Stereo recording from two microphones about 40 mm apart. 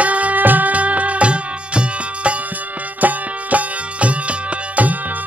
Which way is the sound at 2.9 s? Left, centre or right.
Right.